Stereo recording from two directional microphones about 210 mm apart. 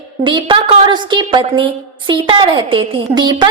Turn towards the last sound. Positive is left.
turn(degrees=-20)  # may be behind; listen again after turning